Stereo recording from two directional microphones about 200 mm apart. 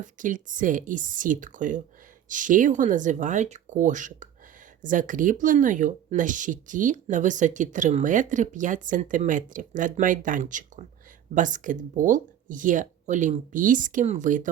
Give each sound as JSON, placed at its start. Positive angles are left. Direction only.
{"t": 0.0, "sound": "speech", "side_deg": -40}